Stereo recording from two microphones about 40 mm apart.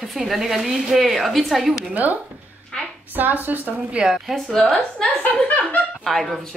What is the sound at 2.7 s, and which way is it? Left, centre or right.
Speech, centre.